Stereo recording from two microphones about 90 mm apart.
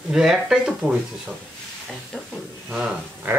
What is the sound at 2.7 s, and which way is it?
Speech, 10° right (ahead or behind).